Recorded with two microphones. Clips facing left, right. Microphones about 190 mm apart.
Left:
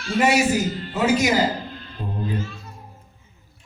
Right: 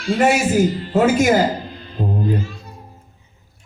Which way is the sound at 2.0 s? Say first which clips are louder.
Right 9 dB; 50° right (ahead or behind).